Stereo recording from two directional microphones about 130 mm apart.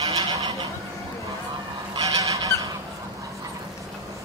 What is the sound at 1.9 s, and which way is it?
Goose, 30° right (ahead or behind).